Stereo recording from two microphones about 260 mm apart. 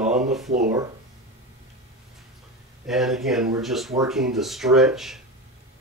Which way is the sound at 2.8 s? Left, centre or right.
Centre.